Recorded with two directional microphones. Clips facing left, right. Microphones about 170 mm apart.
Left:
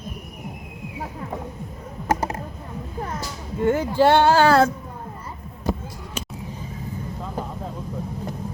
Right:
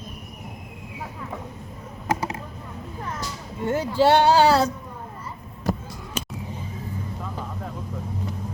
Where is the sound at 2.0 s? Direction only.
50° left (ahead or behind).